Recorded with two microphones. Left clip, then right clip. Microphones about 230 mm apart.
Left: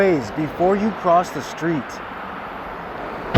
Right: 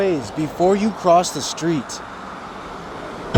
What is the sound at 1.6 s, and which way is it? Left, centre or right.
Speech, right.